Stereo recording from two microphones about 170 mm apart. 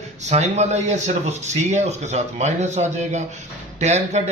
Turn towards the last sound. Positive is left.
turn(degrees=-40)  # may be behind; listen again after turning